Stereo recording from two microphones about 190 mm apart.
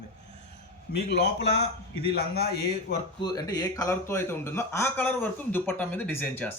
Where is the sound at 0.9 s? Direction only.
60° left (ahead or behind).